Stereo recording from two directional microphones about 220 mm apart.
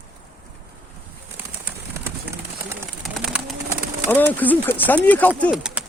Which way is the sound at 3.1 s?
Centre (ahead or behind).